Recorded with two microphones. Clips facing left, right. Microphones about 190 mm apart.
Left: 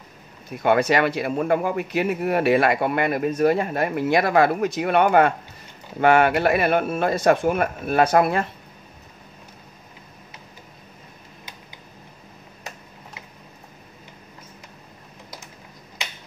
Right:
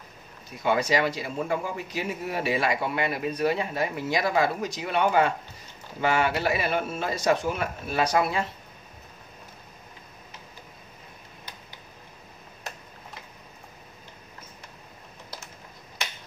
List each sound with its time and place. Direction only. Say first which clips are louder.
0.5 s a man's voice: left 5 dB; 60° left (ahead or behind)